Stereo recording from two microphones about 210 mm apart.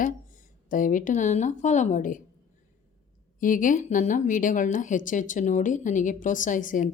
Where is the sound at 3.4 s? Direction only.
40° left (ahead or behind).